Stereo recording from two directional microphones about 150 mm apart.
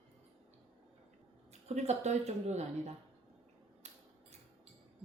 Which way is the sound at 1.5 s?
45° right (ahead or behind).